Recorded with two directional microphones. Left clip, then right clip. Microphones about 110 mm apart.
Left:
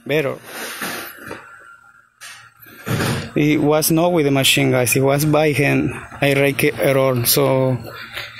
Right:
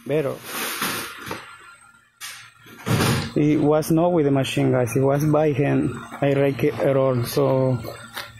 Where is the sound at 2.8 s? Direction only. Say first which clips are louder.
Even; 15° left (ahead or behind).